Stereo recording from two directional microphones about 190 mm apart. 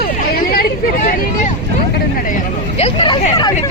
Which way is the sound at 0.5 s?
50° left (ahead or behind).